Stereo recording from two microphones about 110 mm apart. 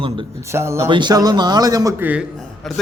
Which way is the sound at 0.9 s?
40° right (ahead or behind).